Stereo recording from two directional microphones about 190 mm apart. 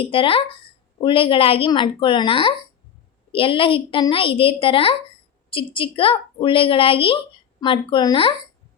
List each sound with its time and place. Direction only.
0.0 s a woman's voice: 30° left (ahead or behind)